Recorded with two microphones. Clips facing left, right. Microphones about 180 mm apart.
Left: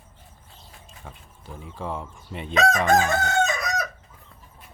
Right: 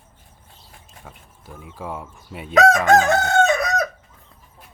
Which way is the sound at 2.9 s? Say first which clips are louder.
Right 5 dB; 80° right.